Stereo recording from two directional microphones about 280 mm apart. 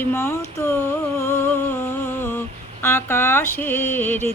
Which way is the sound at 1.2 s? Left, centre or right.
Centre.